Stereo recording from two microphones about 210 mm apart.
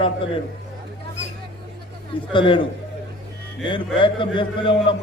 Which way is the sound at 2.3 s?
25° left (ahead or behind).